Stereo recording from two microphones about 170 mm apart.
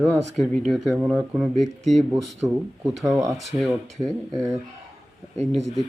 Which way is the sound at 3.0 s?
20° right (ahead or behind).